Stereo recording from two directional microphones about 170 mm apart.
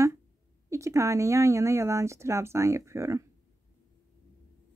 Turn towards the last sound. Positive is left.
turn(degrees=-20)  # may be behind; listen again after turning